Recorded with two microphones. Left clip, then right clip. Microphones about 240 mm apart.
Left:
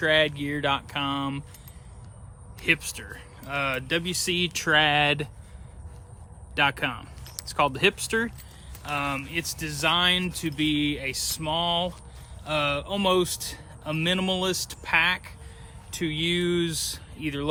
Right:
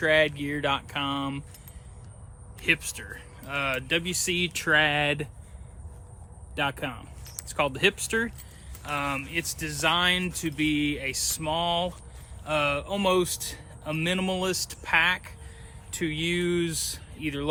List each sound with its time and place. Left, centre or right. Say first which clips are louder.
0.0 s speech: even; centre
2.6 s speech: left 1 dB; centre
6.5 s speech: left 5 dB; left
8.8 s speech: left 1 dB; centre